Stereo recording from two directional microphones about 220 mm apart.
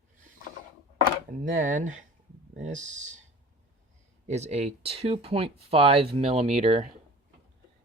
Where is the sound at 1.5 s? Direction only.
35° right (ahead or behind).